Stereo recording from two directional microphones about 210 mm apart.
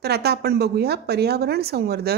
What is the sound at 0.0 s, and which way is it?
A woman's voice, 50° right (ahead or behind).